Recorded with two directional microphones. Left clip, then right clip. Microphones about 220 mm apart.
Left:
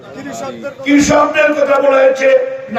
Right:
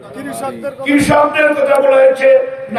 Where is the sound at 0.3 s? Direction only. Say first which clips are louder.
Right 2 dB; 40° right (ahead or behind).